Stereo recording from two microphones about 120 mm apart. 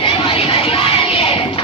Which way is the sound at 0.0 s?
50° left (ahead or behind).